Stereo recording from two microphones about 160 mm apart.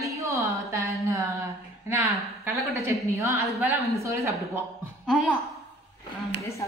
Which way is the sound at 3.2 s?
20° right (ahead or behind).